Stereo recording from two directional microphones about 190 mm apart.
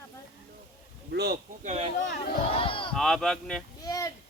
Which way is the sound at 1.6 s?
35° right (ahead or behind).